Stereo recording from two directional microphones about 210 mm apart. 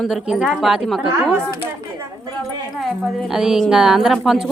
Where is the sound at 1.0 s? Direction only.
15° right (ahead or behind).